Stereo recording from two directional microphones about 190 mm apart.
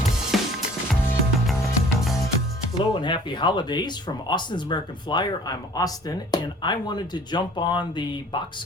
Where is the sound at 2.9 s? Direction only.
25° left (ahead or behind).